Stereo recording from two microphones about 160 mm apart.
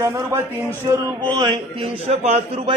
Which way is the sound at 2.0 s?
45° right (ahead or behind).